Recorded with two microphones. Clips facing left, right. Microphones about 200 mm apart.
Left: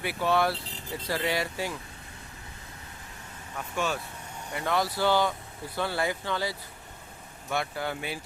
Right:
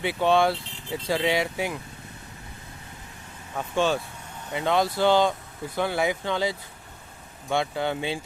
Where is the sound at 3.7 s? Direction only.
30° right (ahead or behind).